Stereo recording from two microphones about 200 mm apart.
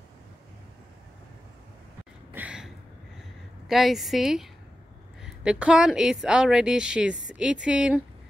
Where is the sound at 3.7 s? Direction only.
Centre (ahead or behind).